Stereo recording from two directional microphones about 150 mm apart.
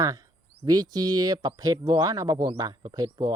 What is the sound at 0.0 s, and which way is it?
Speech, 25° right (ahead or behind).